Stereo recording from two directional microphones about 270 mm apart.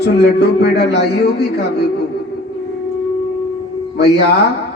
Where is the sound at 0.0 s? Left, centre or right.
Left.